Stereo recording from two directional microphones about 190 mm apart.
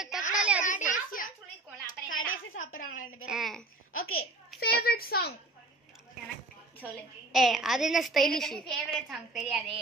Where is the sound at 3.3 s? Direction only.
Centre (ahead or behind).